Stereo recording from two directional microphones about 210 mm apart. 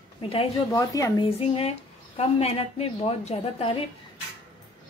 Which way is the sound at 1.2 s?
25° left (ahead or behind).